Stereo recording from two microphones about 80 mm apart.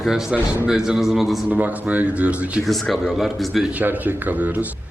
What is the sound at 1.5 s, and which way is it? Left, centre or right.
Speech, right.